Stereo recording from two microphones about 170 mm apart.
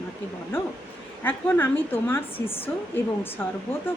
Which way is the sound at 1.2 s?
10° left (ahead or behind).